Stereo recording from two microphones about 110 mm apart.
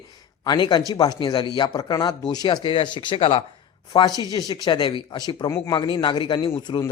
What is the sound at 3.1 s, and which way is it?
Speech, 60° left (ahead or behind).